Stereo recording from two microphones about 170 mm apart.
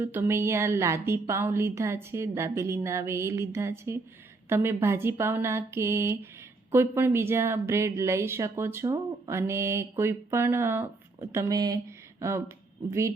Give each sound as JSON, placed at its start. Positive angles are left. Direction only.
{"t": 0.0, "sound": "speech", "side_deg": -15}